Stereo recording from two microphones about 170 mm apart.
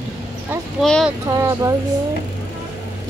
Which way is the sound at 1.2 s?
15° right (ahead or behind).